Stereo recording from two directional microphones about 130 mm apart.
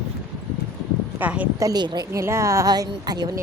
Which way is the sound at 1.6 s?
30° right (ahead or behind).